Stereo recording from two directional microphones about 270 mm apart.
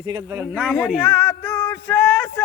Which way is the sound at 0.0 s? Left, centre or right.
Centre.